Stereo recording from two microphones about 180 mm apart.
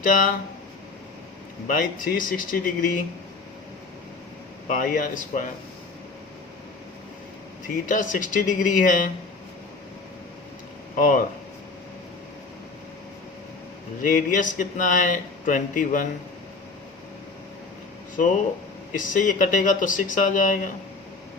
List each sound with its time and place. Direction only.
0.0 s speech: 50° left (ahead or behind)
1.6 s speech: 50° left (ahead or behind)
4.7 s speech: 50° left (ahead or behind)
7.9 s speech: 45° left (ahead or behind)
10.9 s speech: 50° left (ahead or behind)
14.0 s speech: 50° left (ahead or behind)
18.9 s speech: 45° left (ahead or behind)